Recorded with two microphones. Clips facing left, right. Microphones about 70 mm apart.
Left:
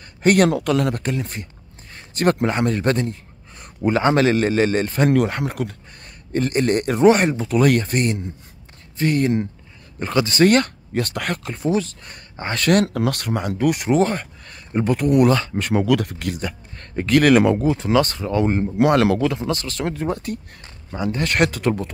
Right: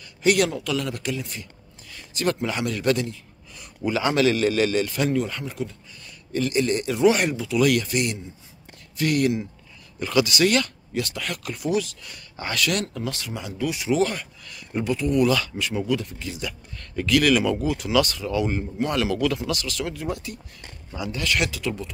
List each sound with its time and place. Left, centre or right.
0.2 s a man's voice: left
5.1 s speech: left
6.3 s speech: left
11.4 s speech: left
12.8 s speech: left
14.9 s speech: left
15.3 s speech: left
15.7 s speech: left
16.3 s speech: left
18.8 s speech: left
19.1 s speech: left